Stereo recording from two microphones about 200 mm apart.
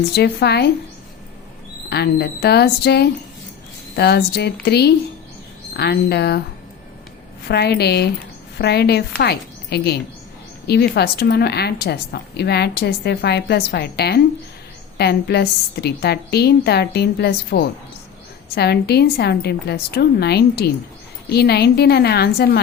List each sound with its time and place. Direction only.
0.1 s a woman's voice: 55° left (ahead or behind)
1.9 s a woman's voice: 55° left (ahead or behind)
7.4 s a woman's voice: 55° left (ahead or behind)